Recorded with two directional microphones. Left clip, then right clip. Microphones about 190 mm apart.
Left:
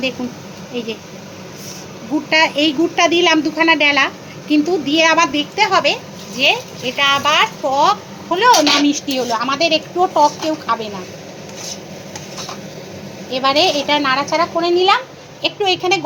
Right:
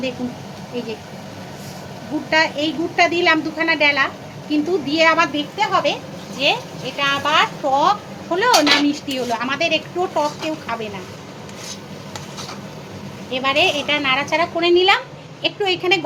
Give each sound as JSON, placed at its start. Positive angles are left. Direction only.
{"t": 2.3, "sound": "a woman's voice", "side_deg": 30}
{"t": 4.9, "sound": "speech", "side_deg": 15}
{"t": 5.5, "sound": "a woman's voice", "side_deg": 30}
{"t": 13.3, "sound": "speech", "side_deg": 20}